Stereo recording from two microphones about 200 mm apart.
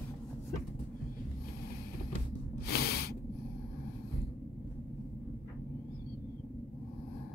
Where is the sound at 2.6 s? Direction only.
50° left (ahead or behind).